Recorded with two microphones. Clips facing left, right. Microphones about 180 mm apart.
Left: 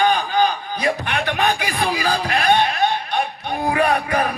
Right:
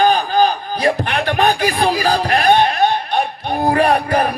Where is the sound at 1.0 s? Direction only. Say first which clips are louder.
Right 5 dB; 50° right (ahead or behind).